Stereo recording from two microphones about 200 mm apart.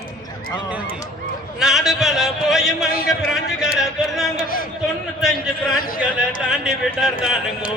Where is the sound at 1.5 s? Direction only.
Centre (ahead or behind).